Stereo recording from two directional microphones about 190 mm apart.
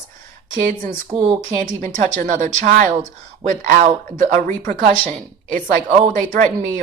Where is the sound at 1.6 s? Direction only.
40° right (ahead or behind).